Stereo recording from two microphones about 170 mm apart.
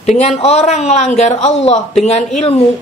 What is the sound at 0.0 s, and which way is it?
A woman's voice, 40° left (ahead or behind).